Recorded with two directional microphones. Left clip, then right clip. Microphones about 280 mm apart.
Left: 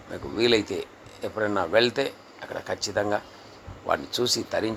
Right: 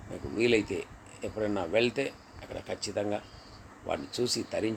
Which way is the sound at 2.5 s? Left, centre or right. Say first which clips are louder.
Left 6 dB; left.